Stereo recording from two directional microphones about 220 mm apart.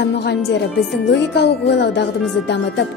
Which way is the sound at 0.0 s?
50° left (ahead or behind).